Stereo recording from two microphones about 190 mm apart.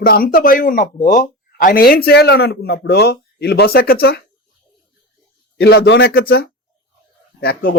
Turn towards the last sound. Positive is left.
turn(degrees=50)  # may be behind; listen again after turning